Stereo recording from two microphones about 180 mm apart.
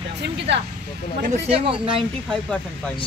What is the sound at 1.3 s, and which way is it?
Speech, 35° right (ahead or behind).